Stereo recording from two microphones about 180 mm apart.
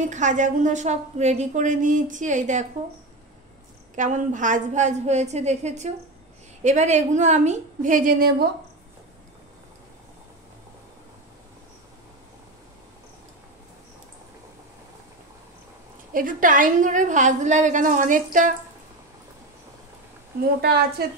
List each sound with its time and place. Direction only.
0.0 s a woman's voice: 45° right (ahead or behind)
3.9 s a woman's voice: 45° right (ahead or behind)
16.1 s a woman's voice: 50° right (ahead or behind)